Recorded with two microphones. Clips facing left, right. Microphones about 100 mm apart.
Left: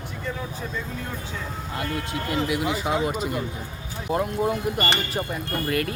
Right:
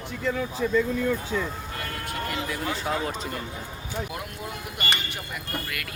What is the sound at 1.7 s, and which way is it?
Speech, 20° left (ahead or behind).